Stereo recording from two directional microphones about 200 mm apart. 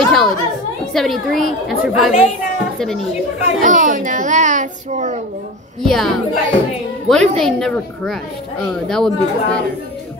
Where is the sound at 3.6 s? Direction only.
40° right (ahead or behind).